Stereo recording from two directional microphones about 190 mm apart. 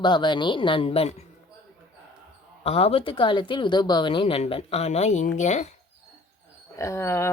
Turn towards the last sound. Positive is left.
turn(degrees=15)  # may be behind; listen again after turning